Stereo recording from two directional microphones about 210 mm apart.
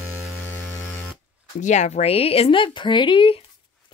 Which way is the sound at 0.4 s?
10° left (ahead or behind).